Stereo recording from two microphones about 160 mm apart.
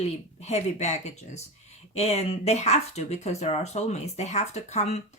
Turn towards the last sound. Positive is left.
turn(degrees=45)  # may be behind; listen again after turning